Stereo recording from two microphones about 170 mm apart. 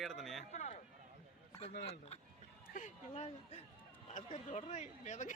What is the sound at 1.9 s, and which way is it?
Speech, 40° left (ahead or behind).